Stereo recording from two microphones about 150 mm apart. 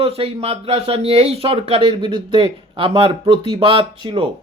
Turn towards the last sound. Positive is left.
turn(degrees=-35)  # may be behind; listen again after turning